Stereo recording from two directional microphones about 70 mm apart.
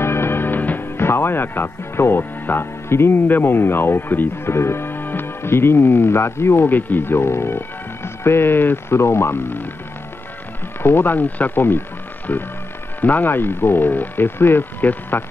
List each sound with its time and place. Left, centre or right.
0.0 s speech: left
10.8 s speech: left